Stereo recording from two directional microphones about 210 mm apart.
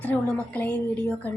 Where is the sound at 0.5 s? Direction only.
10° left (ahead or behind).